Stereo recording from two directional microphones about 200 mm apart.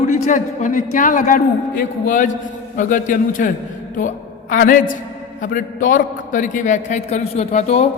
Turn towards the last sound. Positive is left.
turn(degrees=35)  # may be behind; listen again after turning